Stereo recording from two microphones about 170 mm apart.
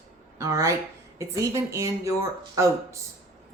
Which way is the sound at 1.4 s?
20° right (ahead or behind).